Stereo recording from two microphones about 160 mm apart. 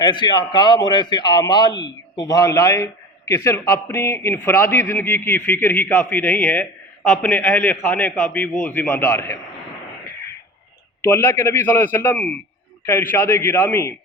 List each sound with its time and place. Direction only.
0.0 s a man's voice: 30° left (ahead or behind)
11.0 s a man's voice: 15° left (ahead or behind)